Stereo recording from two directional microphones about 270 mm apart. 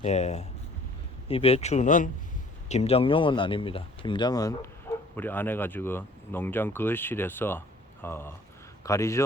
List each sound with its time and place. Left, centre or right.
0.0 s speech: left